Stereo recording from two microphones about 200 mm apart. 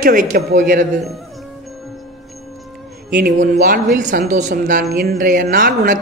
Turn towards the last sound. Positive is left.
turn(degrees=-40)  # may be behind; listen again after turning